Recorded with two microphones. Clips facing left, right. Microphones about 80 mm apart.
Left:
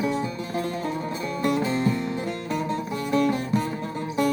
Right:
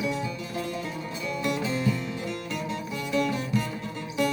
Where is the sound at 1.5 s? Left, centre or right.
Left.